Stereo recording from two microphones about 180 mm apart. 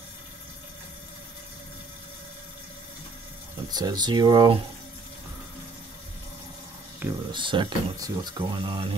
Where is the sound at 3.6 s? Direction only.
20° right (ahead or behind).